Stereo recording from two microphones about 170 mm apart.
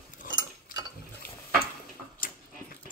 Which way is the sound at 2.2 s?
55° left (ahead or behind).